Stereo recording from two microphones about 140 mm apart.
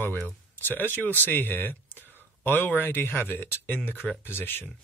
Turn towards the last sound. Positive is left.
turn(degrees=15)  # may be behind; listen again after turning